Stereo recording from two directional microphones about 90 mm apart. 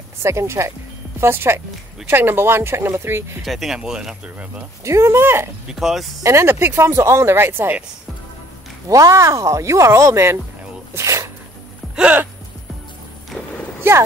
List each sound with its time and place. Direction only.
0.2 s speech: 30° right (ahead or behind)
3.4 s speech: 5° right (ahead or behind)
4.8 s speech: 35° right (ahead or behind)
5.7 s speech: 5° right (ahead or behind)
6.2 s speech: 30° right (ahead or behind)
8.8 s speech: 40° right (ahead or behind)
10.9 s a sound: 35° right (ahead or behind)
11.9 s a sound: 15° right (ahead or behind)